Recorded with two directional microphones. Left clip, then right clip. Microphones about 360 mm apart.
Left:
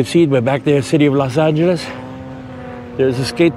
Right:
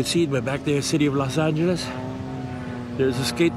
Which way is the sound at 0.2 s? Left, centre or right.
Centre.